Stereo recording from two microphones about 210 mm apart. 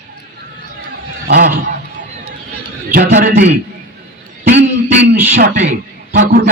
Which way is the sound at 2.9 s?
45° right (ahead or behind).